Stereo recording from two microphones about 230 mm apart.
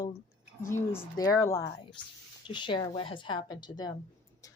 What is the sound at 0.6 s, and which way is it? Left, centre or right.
A woman's voice, centre.